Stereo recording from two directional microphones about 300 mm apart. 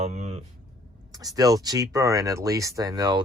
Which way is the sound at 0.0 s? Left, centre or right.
Right.